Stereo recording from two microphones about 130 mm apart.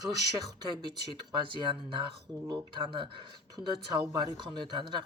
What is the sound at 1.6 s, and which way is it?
Speech, 40° right (ahead or behind).